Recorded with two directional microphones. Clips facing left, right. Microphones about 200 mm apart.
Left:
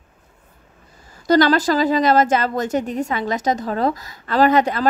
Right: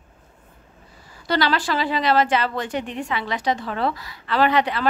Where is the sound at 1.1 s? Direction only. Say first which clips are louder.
Left 7 dB; 45° left (ahead or behind).